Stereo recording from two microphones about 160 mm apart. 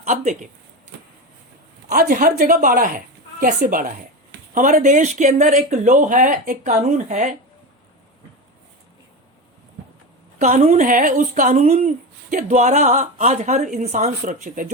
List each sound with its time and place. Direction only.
0.0 s speech: 50° right (ahead or behind)
1.9 s speech: 60° right (ahead or behind)
10.3 s speech: 45° right (ahead or behind)